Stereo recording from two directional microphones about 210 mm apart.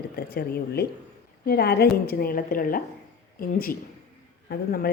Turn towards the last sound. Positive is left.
turn(degrees=45)  # may be behind; listen again after turning